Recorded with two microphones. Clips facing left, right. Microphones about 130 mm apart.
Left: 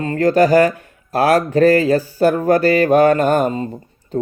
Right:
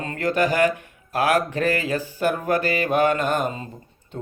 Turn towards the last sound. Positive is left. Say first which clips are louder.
# left 12 dB
turn(degrees=35)  # may be behind; listen again after turning